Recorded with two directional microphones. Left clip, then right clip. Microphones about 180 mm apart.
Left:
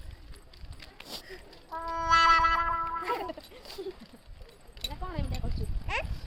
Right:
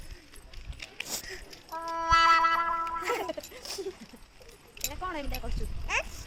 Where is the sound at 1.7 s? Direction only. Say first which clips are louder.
Even; centre (ahead or behind).